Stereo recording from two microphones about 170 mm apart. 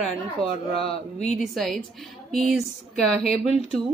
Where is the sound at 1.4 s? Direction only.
Centre (ahead or behind).